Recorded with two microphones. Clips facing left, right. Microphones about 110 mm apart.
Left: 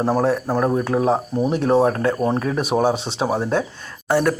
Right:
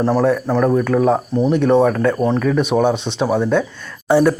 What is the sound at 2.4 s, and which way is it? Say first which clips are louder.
Speech: right 4 dB; 35° left (ahead or behind).